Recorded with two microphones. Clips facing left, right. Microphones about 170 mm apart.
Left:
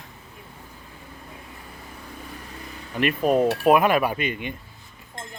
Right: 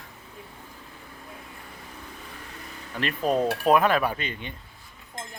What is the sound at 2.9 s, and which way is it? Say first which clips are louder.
Speech: left 4 dB; 15° left (ahead or behind).